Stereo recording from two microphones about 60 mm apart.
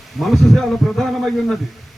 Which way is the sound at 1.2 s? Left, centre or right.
Centre.